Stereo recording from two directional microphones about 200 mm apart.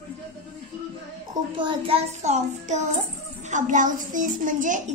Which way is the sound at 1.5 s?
25° right (ahead or behind).